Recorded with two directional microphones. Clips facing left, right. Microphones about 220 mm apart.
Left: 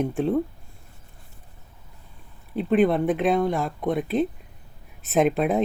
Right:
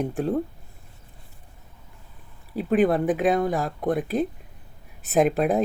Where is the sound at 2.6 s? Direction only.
Centre (ahead or behind).